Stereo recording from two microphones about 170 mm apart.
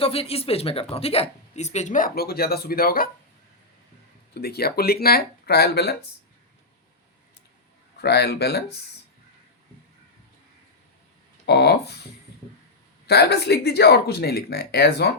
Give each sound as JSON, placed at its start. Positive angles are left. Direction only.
{"t": 0.0, "sound": "a woman's voice", "side_deg": 35}
{"t": 4.4, "sound": "speech", "side_deg": 70}
{"t": 8.0, "sound": "speech", "side_deg": 70}
{"t": 11.4, "sound": "speech", "side_deg": 75}
{"t": 13.1, "sound": "speech", "side_deg": 75}